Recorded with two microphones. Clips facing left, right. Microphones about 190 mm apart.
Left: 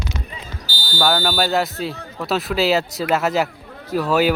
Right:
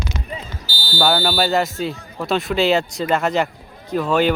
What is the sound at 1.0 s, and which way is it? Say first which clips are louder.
Speech: right 1 dB; centre (ahead or behind).